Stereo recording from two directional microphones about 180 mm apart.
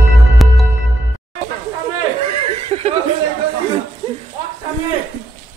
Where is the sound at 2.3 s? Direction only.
35° right (ahead or behind).